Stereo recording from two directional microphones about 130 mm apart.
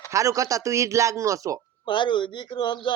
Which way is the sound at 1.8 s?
35° left (ahead or behind).